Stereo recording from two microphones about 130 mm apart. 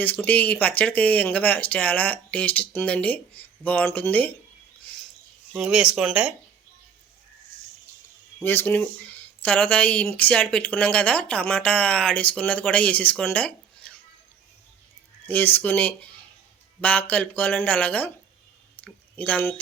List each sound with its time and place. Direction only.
0.0 s speech: 15° left (ahead or behind)
5.5 s speech: 5° right (ahead or behind)
8.4 s speech: 15° left (ahead or behind)
15.3 s speech: 15° left (ahead or behind)
18.8 s a sound: 10° left (ahead or behind)